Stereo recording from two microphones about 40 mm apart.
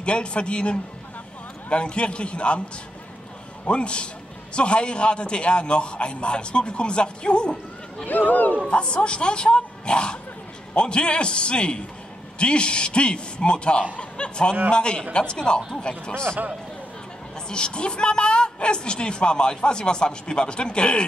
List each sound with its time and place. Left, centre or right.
0.0 s a woman's voice: left
3.6 s a woman's voice: left
8.3 s speech: left
8.6 s a woman's voice: left
9.6 s a sound: left
10.7 s a woman's voice: left
17.5 s a woman's voice: left